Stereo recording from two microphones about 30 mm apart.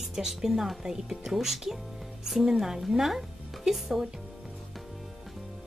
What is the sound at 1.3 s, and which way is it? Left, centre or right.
A woman's voice, centre.